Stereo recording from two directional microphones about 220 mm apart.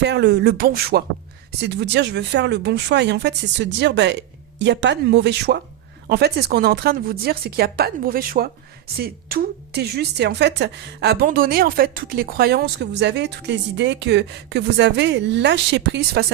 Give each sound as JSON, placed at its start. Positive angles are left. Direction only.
{"t": 0.0, "sound": "a woman's voice", "side_deg": -50}